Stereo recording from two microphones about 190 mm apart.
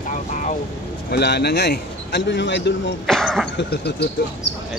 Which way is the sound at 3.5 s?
60° left (ahead or behind).